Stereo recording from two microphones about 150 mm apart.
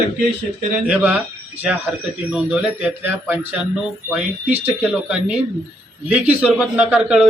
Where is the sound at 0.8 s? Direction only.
10° right (ahead or behind).